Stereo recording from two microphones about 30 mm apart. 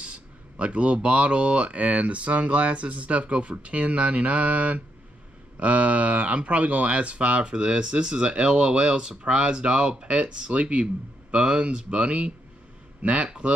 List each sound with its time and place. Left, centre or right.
0.0 s a sound: right
1.0 s speech: right
1.8 s speech: right